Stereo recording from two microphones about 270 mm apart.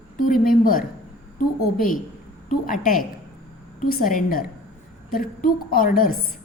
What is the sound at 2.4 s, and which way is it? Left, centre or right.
A woman's voice, left.